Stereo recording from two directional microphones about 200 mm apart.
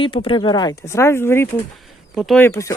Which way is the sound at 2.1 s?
Centre (ahead or behind).